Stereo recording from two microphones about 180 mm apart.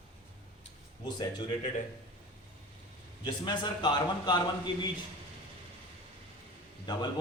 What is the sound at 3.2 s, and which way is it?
A man's voice, 25° left (ahead or behind).